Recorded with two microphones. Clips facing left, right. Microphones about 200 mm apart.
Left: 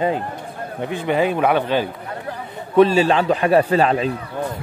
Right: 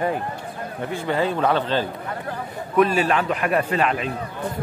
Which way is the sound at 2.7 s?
30° left (ahead or behind).